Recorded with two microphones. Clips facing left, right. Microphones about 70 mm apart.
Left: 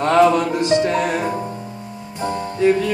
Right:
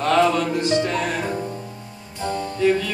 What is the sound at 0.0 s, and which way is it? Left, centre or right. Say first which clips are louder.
Music: left 4 dB; left.